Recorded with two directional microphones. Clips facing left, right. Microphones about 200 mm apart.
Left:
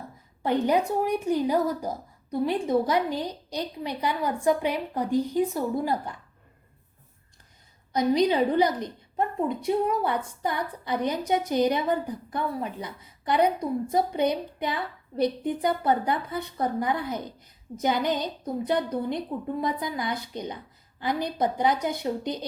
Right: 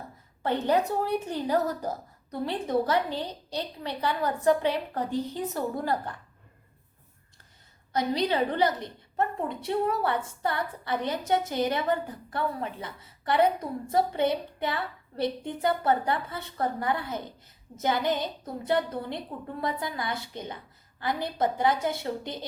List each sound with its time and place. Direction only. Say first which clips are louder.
0.4 s a woman's voice: left 2 dB; 15° left (ahead or behind)
7.9 s a woman's voice: left 4 dB; 15° left (ahead or behind)